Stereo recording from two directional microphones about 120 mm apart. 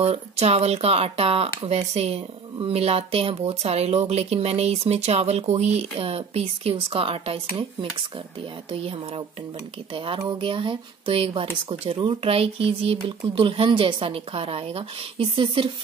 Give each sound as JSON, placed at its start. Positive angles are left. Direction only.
{"t": 0.0, "sound": "speech", "side_deg": -55}
{"t": 8.7, "sound": "speech", "side_deg": -50}